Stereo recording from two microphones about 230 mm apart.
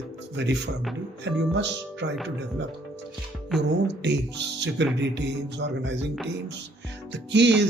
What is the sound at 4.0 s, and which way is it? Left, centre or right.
Speech, right.